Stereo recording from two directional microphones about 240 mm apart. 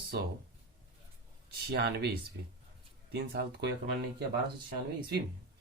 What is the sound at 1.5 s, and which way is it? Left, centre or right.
Speech, right.